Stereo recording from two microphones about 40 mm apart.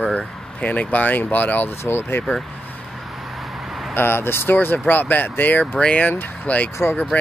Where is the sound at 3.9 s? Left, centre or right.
Left.